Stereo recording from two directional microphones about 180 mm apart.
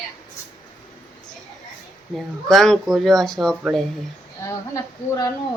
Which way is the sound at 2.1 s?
Centre (ahead or behind).